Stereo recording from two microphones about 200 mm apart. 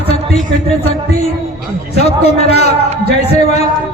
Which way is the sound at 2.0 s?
30° left (ahead or behind).